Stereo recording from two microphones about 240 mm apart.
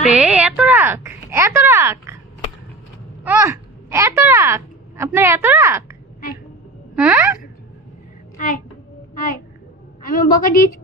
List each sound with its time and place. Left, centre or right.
0.2 s speech: centre
3.3 s a child's voice: centre
7.0 s speech: centre
8.4 s speech: left
9.1 s a sound: left
10.0 s a woman's voice: left